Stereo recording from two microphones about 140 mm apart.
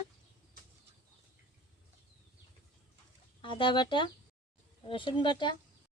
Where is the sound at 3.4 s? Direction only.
35° left (ahead or behind).